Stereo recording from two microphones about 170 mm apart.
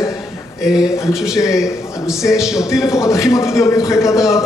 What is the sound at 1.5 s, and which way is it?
Speech, 5° right (ahead or behind).